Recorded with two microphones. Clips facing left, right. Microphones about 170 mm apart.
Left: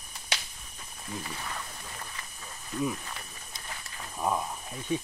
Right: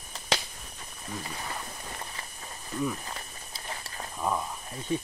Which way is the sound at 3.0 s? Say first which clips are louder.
Right 2 dB; 35° right (ahead or behind).